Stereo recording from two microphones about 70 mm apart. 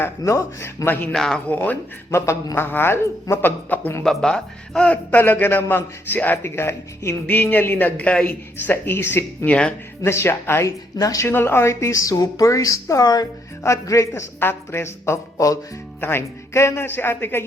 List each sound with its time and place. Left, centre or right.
0.2 s speech: left
0.9 s a man's voice: left
1.1 s speech: centre
1.5 s a man's voice: left
2.0 s speech: left
2.6 s speech: left
4.0 s a man's voice: centre; by 6.4 s left
6.4 s speech: left
7.5 s a man's voice: left
9.5 s speech: centre
10.0 s speech: left
10.7 s a woman's voice: left
11.3 s speech: left
14.3 s speech: left